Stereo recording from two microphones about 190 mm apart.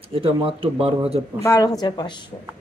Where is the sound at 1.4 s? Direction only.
15° left (ahead or behind).